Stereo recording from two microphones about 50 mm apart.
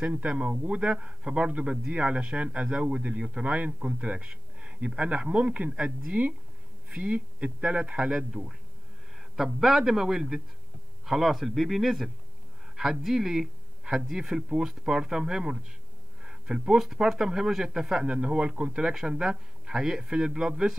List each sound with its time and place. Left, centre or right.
0.0 s speech: right
6.1 s speech: right
6.9 s speech: right
7.9 s speech: centre